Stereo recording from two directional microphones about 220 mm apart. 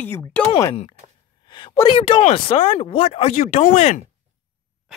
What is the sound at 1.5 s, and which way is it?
Speech, 20° left (ahead or behind).